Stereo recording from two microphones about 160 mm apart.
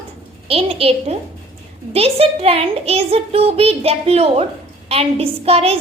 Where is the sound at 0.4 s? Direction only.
40° right (ahead or behind).